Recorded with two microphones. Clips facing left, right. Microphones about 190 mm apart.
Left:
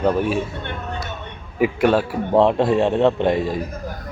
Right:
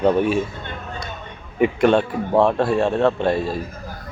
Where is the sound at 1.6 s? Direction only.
5° left (ahead or behind).